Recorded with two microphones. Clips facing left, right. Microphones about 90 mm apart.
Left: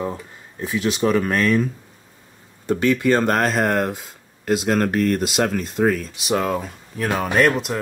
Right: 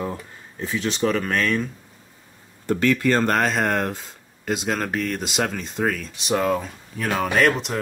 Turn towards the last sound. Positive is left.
turn(degrees=5)  # may be behind; listen again after turning